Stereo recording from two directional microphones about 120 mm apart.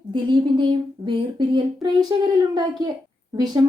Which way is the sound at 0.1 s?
40° right (ahead or behind).